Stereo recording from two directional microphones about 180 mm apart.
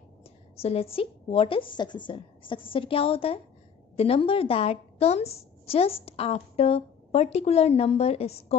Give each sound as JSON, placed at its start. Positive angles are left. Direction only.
{"t": 0.6, "sound": "a woman's voice", "side_deg": 35}